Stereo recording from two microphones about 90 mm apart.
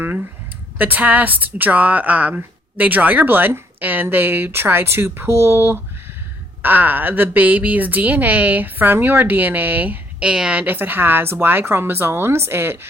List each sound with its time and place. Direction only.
0.8 s a woman's voice: 20° right (ahead or behind)